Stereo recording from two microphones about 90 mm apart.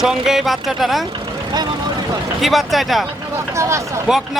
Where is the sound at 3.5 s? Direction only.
35° right (ahead or behind).